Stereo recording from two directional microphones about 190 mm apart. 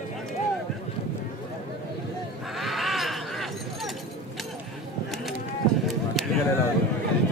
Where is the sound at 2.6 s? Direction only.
Centre (ahead or behind).